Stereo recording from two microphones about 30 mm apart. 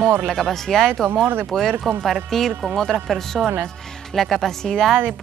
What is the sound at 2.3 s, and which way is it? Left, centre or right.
Speech, centre.